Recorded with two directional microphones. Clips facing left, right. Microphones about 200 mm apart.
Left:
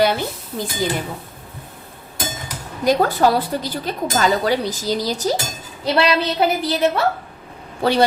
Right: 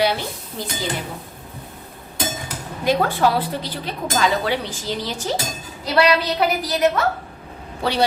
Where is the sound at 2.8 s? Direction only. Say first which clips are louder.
Left 3 dB; 40° left (ahead or behind).